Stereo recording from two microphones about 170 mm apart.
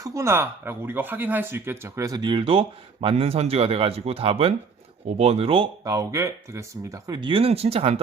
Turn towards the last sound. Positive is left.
turn(degrees=-35)  # may be behind; listen again after turning